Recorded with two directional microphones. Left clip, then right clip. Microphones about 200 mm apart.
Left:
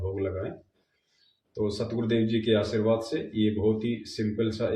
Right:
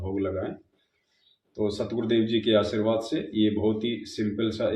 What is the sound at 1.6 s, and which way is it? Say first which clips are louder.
Speech: right 2 dB; 30° right (ahead or behind).